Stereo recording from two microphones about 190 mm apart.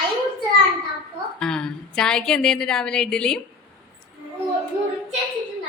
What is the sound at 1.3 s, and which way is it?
A woman's voice, 5° left (ahead or behind).